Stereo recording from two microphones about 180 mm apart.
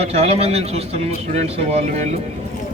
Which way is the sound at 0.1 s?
35° right (ahead or behind).